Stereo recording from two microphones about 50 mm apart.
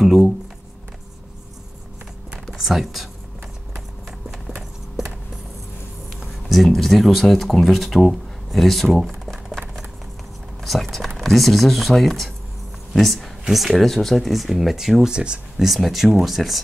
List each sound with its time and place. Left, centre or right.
0.0 s a sound: centre
2.4 s speech: centre
6.1 s speech: centre
10.6 s speech: centre
15.1 s speech: centre
15.6 s speech: centre